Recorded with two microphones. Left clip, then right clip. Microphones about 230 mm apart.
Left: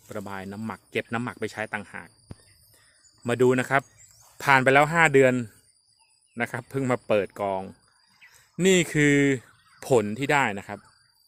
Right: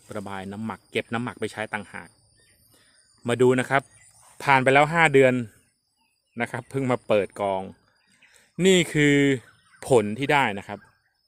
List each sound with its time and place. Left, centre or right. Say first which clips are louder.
0.1 s speech: right 1 dB; centre
3.2 s speech: right 1 dB; centre